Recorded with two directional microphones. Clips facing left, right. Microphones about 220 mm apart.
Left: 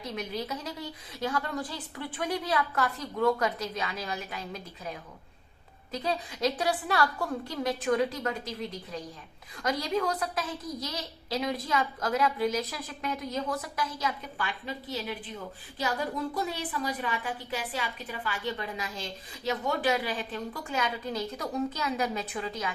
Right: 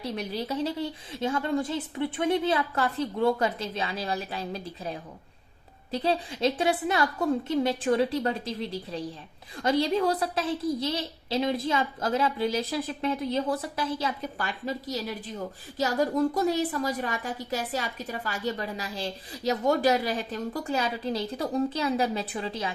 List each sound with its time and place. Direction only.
0.0 s a woman's voice: 35° right (ahead or behind)